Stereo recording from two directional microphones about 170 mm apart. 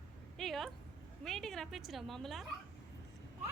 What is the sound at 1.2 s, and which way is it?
A woman's voice, centre (ahead or behind).